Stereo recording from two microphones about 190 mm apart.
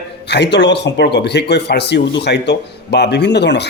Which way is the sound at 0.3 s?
65° left (ahead or behind).